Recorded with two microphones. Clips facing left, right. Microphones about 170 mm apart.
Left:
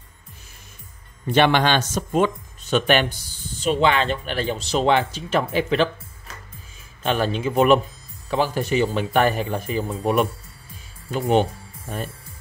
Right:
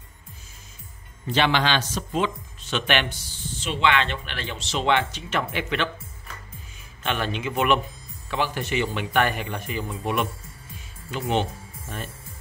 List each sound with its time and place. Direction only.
1.2 s a man's voice: 55° left (ahead or behind)